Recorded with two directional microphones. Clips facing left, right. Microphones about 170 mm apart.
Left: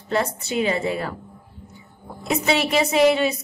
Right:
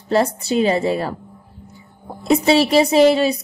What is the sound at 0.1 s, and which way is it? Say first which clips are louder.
A woman's voice: right 6 dB; 35° right (ahead or behind).